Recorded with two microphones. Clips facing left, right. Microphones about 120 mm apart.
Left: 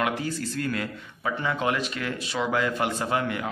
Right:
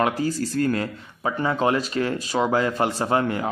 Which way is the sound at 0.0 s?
40° right (ahead or behind).